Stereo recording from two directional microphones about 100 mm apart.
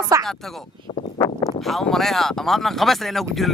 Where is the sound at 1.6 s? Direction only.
5° left (ahead or behind).